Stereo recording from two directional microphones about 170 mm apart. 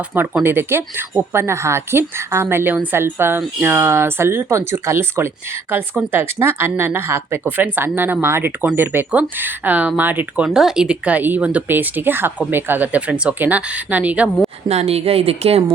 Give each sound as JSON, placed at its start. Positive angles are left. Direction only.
{"t": 0.1, "sound": "speech", "side_deg": -10}
{"t": 14.7, "sound": "speech", "side_deg": -40}